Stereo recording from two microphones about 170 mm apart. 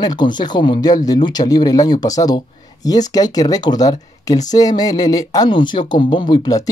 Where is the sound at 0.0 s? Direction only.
25° left (ahead or behind).